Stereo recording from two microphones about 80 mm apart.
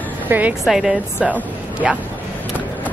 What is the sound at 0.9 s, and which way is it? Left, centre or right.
Speech, centre.